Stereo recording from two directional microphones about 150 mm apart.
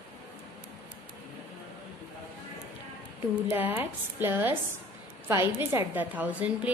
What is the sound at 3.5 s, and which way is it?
A woman's voice, 15° right (ahead or behind).